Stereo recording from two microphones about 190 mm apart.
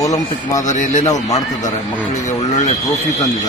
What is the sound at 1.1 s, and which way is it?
Speech, 20° left (ahead or behind).